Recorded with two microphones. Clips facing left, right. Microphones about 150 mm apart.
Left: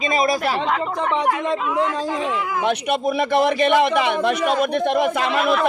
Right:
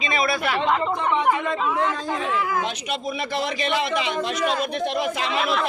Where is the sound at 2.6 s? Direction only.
55° left (ahead or behind).